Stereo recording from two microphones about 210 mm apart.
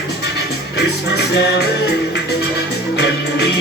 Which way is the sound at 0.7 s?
50° left (ahead or behind).